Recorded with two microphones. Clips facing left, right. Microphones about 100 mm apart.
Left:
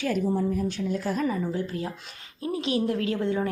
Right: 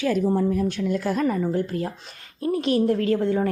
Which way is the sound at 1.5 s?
50° right (ahead or behind).